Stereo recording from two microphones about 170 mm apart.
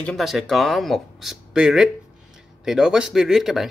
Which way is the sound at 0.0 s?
Centre (ahead or behind).